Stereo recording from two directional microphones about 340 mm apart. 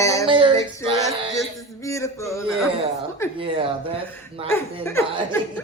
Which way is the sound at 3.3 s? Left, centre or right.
Centre.